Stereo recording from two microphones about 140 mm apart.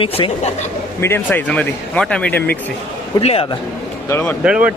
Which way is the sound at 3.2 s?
45° left (ahead or behind).